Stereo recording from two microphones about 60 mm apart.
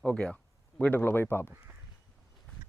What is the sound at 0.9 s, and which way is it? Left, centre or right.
Speech, left.